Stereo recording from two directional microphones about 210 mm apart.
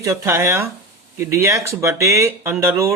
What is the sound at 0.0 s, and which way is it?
Speech, 15° right (ahead or behind).